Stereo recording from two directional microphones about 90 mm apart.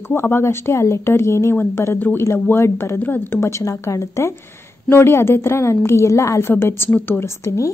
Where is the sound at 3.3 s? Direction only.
35° left (ahead or behind).